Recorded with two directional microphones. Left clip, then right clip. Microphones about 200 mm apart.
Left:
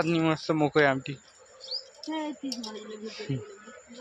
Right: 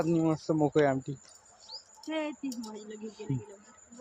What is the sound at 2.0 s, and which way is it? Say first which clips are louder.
Bird: right 1 dB; 25° right (ahead or behind).